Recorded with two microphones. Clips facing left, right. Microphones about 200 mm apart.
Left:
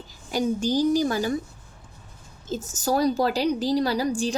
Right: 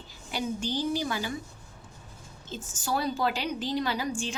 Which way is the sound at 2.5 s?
40° left (ahead or behind).